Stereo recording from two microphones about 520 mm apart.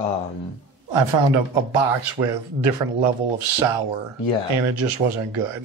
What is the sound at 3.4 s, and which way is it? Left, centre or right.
Speech, right.